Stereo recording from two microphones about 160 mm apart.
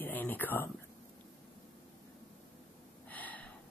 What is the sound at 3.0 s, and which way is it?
Gasp, 10° left (ahead or behind).